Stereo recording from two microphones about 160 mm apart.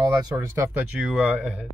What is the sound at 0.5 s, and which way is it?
Speech, 10° right (ahead or behind).